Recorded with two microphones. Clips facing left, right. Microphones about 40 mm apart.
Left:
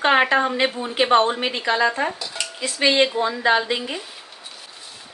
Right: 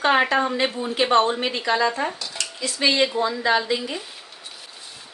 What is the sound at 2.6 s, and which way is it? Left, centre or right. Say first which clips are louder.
A woman's voice: left 2 dB; left.